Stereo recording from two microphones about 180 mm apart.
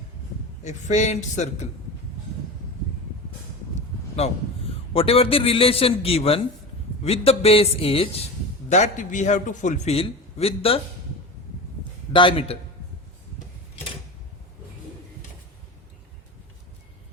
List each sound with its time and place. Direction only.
0.6 s a man's voice: 40° left (ahead or behind)
3.8 s a man's voice: 35° left (ahead or behind)
12.1 s a man's voice: 30° left (ahead or behind)